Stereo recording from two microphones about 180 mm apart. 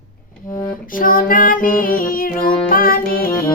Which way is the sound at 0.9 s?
50° left (ahead or behind).